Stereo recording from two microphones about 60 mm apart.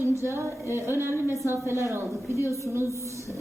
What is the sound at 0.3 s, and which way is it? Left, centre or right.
A woman's voice, right.